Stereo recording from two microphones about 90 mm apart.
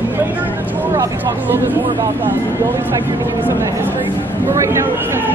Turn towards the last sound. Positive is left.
turn(degrees=-30)  # may be behind; listen again after turning